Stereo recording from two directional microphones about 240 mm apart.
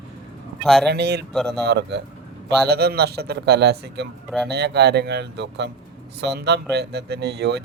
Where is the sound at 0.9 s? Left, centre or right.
Right.